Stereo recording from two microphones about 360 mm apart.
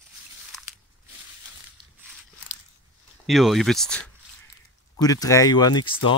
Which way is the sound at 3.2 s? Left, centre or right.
Centre.